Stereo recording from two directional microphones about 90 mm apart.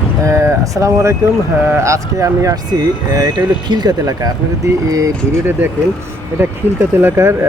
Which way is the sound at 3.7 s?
50° right (ahead or behind).